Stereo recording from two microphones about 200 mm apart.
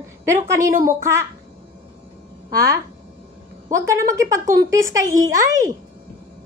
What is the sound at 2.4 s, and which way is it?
Speech, 50° right (ahead or behind).